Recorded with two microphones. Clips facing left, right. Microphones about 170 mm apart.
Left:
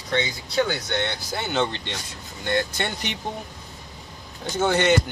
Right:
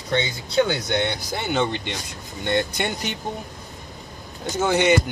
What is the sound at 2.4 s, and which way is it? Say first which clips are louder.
Speech: right 2 dB; 20° right (ahead or behind).